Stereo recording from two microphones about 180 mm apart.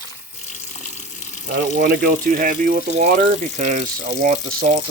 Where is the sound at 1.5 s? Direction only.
55° right (ahead or behind).